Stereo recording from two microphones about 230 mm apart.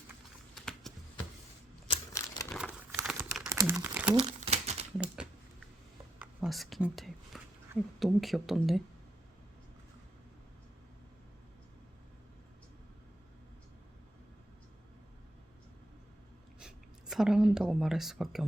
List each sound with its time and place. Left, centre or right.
0.5 s clip-clop: centre
1.9 s typewriter: centre
2.9 s crumpling: centre
4.4 s typewriter: right
6.1 s a sound: centre
7.9 s speech: centre
16.6 s speech: centre